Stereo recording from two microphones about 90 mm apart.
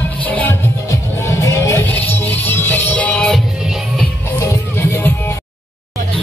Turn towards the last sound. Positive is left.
turn(degrees=25)  # may be behind; listen again after turning